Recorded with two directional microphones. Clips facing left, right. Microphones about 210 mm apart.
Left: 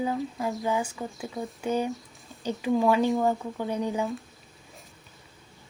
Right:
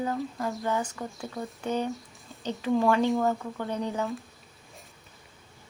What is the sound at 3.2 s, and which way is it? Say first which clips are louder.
Speech: left 1 dB; 10° left (ahead or behind).